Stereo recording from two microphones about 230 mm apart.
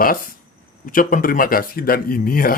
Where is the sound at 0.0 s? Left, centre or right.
Left.